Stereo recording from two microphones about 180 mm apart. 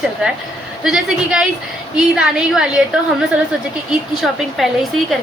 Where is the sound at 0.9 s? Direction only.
5° right (ahead or behind).